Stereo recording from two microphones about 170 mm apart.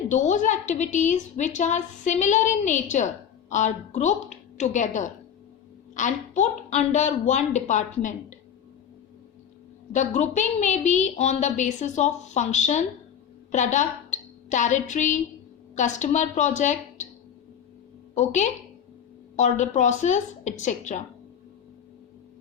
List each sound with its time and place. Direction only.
0.1 s a woman's voice: 45° left (ahead or behind)
9.9 s a woman's voice: 45° left (ahead or behind)
18.1 s a woman's voice: 45° left (ahead or behind)